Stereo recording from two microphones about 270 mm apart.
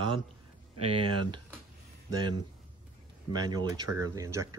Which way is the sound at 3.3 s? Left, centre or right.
Centre.